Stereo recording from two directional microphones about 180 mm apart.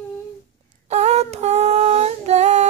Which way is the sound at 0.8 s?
40° right (ahead or behind).